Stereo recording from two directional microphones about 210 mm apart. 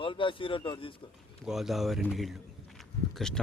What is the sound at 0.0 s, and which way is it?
Speech, 25° left (ahead or behind).